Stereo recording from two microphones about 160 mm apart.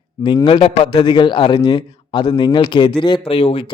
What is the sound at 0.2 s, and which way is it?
A man's voice, 30° left (ahead or behind).